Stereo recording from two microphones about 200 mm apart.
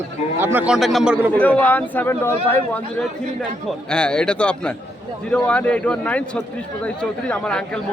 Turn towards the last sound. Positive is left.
turn(degrees=5)  # may be behind; listen again after turning